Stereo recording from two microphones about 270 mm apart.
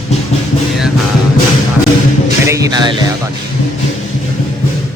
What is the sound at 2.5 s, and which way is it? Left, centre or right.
Speech, centre.